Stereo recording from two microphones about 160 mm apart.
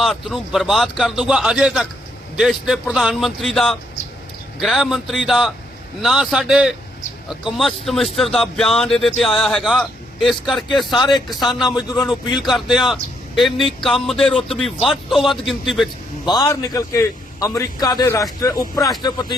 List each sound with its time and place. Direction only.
0.0 s speech: centre (ahead or behind)
11.0 s a man's voice: 25° left (ahead or behind)
12.4 s speech: centre (ahead or behind)
16.2 s a man's voice: 25° left (ahead or behind)